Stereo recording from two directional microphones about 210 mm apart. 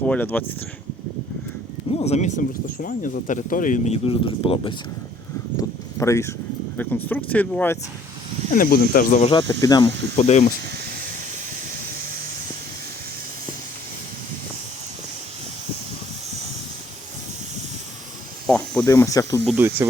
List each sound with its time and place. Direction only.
0.0 s speech: 10° left (ahead or behind)
2.0 s speech: 30° left (ahead or behind)
5.5 s a sound: 15° left (ahead or behind)
6.7 s speech: 10° left (ahead or behind)
8.5 s speech: 45° left (ahead or behind); by 9.9 s 20° left (ahead or behind)
10.2 s speech: 35° left (ahead or behind)
18.4 s snake: 5° left (ahead or behind)
18.9 s speech: 15° left (ahead or behind)
19.5 s speech: 10° right (ahead or behind)